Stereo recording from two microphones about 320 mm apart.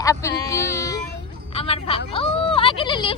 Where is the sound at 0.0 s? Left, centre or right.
Centre.